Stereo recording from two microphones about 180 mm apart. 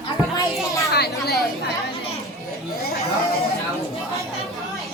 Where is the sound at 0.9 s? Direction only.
60° left (ahead or behind).